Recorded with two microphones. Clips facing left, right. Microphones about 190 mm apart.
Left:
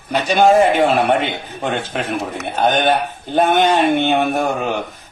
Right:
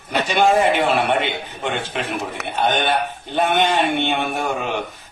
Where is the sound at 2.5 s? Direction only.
45° left (ahead or behind).